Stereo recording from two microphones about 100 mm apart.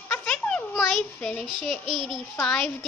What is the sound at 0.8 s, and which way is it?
Speech, centre (ahead or behind).